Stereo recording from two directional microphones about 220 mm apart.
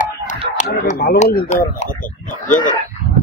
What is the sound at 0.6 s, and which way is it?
Speech, 40° left (ahead or behind).